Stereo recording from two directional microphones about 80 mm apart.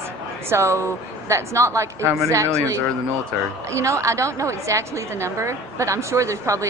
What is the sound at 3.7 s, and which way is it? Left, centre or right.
A woman's voice, right.